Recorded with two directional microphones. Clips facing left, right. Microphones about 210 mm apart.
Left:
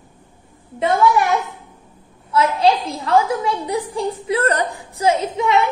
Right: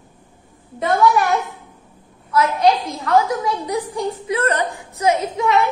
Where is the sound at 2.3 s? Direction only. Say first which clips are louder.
Even; 25° left (ahead or behind).